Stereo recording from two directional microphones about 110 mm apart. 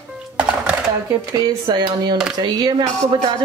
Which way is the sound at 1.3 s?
40° right (ahead or behind).